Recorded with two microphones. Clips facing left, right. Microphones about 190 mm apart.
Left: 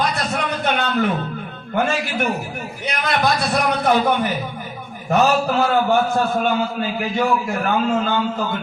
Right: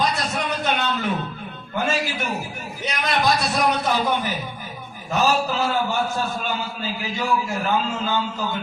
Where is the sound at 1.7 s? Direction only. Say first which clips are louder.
Left 4 dB; 55° left (ahead or behind).